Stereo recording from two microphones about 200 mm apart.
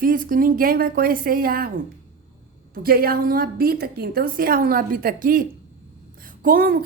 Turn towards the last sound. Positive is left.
turn(degrees=-45)  # may be behind; listen again after turning